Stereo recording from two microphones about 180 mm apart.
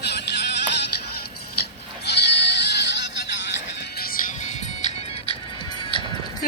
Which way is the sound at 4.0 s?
50° left (ahead or behind).